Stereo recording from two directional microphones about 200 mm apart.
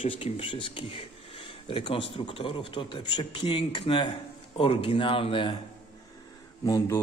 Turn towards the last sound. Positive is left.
turn(degrees=15)  # may be behind; listen again after turning